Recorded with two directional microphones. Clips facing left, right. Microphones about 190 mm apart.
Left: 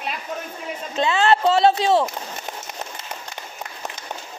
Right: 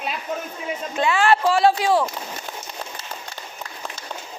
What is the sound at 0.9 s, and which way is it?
Speech, 20° left (ahead or behind).